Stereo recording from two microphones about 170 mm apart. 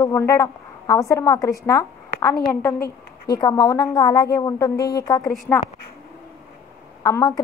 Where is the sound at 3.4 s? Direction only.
20° left (ahead or behind).